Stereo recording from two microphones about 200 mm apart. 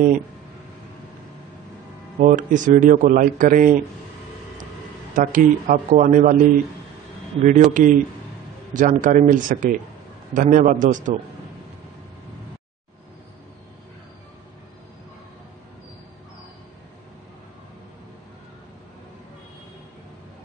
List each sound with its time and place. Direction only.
2.1 s a man's voice: 40° right (ahead or behind)
5.1 s a man's voice: 40° right (ahead or behind)
7.4 s a man's voice: 40° right (ahead or behind)